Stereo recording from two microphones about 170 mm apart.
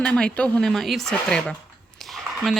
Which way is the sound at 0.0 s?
5° left (ahead or behind).